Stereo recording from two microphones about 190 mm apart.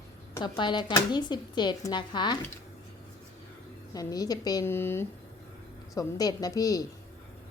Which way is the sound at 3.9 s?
20° left (ahead or behind).